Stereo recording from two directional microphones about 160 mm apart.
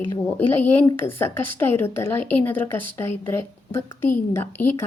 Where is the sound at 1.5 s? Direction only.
15° left (ahead or behind).